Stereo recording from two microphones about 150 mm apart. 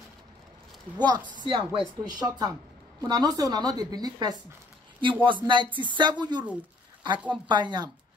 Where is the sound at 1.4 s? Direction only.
35° right (ahead or behind).